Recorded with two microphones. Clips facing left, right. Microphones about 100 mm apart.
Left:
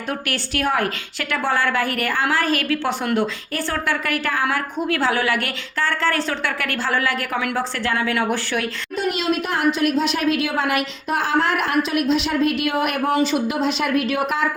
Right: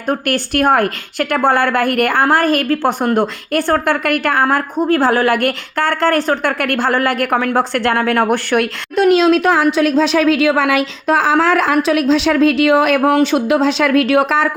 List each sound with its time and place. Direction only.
0.1 s a woman's voice: 55° right (ahead or behind)
4.4 s a woman's voice: 45° right (ahead or behind); by 14.5 s 90° right